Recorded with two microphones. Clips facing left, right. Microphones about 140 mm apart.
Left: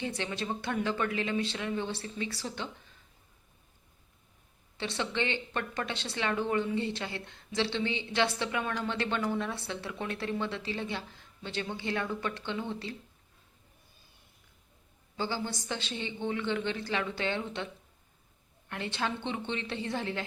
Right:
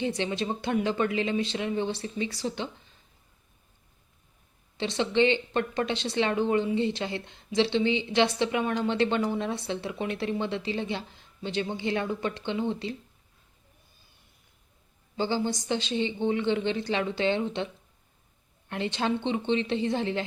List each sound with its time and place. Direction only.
0.0 s speech: 20° right (ahead or behind)
4.8 s speech: 20° right (ahead or behind)
15.2 s speech: 20° right (ahead or behind)
18.7 s speech: 20° right (ahead or behind)